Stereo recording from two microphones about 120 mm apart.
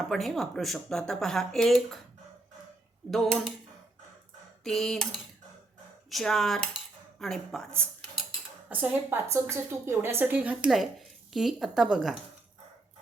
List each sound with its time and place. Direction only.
0.0 s speech: centre (ahead or behind)
3.1 s speech: 5° left (ahead or behind)
4.6 s speech: 5° left (ahead or behind)
6.1 s cutlery: centre (ahead or behind)
8.7 s a woman's voice: 15° right (ahead or behind)